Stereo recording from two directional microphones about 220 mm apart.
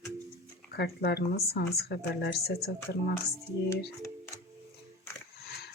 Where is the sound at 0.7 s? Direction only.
45° left (ahead or behind).